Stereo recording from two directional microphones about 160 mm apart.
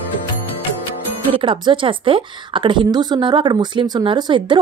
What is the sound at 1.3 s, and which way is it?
A woman's voice, 30° right (ahead or behind).